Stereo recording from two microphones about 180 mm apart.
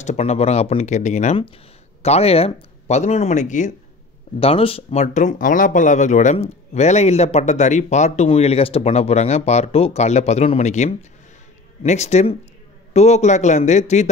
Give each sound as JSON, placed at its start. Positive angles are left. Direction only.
{"t": 0.0, "sound": "speech", "side_deg": 40}
{"t": 4.4, "sound": "speech", "side_deg": 30}